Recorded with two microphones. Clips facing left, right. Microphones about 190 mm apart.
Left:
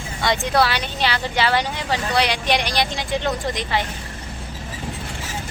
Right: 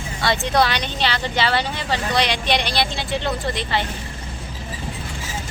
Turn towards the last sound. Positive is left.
turn(degrees=15)  # may be behind; listen again after turning